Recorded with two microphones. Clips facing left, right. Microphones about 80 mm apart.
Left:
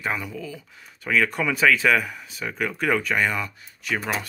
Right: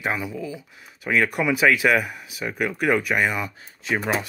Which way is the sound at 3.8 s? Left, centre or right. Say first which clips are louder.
Right 3 dB; right.